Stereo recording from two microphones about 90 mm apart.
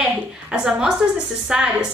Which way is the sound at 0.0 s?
10° right (ahead or behind).